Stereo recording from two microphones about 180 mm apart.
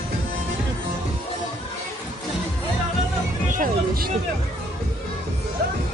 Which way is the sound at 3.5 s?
50° right (ahead or behind).